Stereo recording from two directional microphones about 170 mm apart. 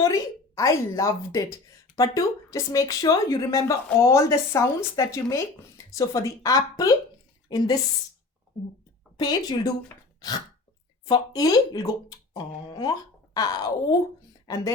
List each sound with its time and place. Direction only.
0.0 s a woman's voice: 20° left (ahead or behind)
9.1 s a woman's voice: 25° left (ahead or behind)
11.0 s a woman's voice: 25° left (ahead or behind)